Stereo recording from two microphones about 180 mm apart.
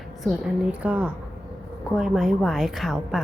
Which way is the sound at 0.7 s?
10° right (ahead or behind).